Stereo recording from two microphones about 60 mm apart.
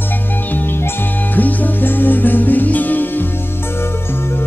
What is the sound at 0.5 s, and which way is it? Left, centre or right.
Music, left.